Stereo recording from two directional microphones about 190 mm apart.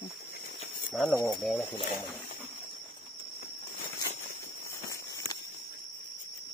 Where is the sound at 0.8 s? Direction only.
Centre (ahead or behind).